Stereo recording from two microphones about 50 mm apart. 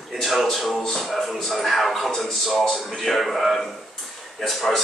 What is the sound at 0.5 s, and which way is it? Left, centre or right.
A man's voice, centre.